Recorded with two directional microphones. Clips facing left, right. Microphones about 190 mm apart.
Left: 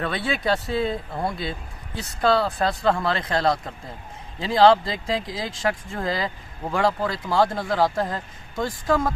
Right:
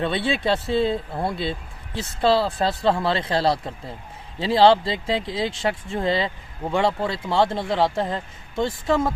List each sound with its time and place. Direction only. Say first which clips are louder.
0.0 s speech: right 3 dB; 30° right (ahead or behind)
2.0 s speech: right 1 dB; 30° right (ahead or behind)